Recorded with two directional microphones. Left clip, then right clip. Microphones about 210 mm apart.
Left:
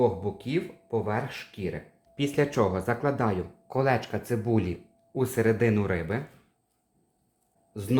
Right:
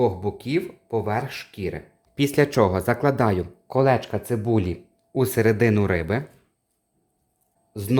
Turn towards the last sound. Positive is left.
turn(degrees=-50)  # may be behind; listen again after turning